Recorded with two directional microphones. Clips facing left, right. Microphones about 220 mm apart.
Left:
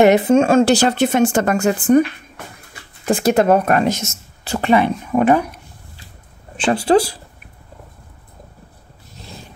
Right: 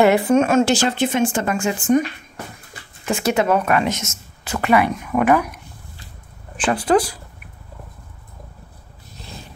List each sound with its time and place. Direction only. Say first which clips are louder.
0.0 s a woman's voice: left 3 dB; 20° left (ahead or behind); by 2.0 s 35° left (ahead or behind)
3.1 s speech: left 4 dB; 50° left (ahead or behind)
3.3 s a woman's voice: left 3 dB; 40° left (ahead or behind)